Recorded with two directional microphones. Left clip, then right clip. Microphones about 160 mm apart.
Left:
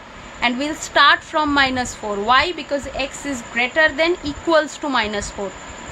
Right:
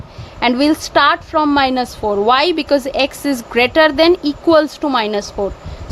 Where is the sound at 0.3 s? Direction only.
45° right (ahead or behind).